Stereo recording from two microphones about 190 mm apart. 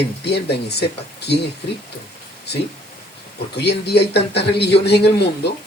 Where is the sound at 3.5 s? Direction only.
60° left (ahead or behind).